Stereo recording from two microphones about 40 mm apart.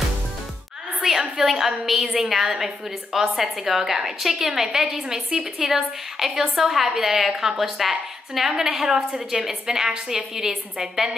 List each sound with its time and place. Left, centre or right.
1.0 s a sound: centre
1.4 s a woman's voice: centre
9.9 s a woman's voice: right
10.3 s a woman's voice: centre